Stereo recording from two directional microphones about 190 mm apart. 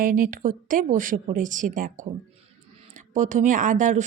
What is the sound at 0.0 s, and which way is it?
A woman's voice, 45° right (ahead or behind).